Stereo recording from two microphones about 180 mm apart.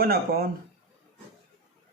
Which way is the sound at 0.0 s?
60° right (ahead or behind).